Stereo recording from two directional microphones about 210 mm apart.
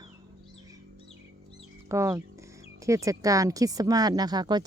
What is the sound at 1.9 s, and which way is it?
Speech, 15° right (ahead or behind).